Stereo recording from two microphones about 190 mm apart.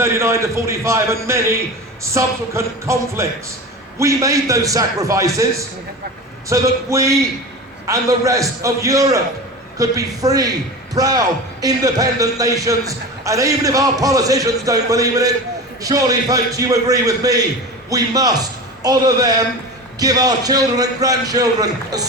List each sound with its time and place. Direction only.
0.0 s a man's voice: 15° right (ahead or behind)
6.5 s a man's voice: 15° right (ahead or behind)